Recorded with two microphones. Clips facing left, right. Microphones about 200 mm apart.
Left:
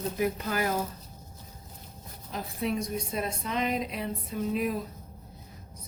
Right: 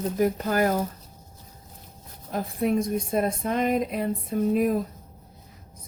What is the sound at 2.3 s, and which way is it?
A woman's voice, 50° right (ahead or behind).